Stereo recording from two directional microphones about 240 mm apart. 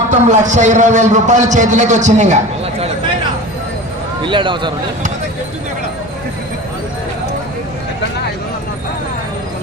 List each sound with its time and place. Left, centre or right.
0.1 s a man's voice: right
4.2 s speech: centre